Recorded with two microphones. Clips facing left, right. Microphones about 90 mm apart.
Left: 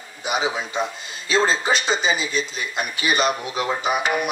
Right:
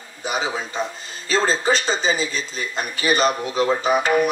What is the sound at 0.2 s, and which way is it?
Speech, 35° right (ahead or behind).